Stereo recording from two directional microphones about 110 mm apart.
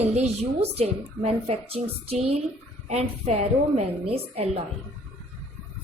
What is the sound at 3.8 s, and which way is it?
Speech, 65° right (ahead or behind).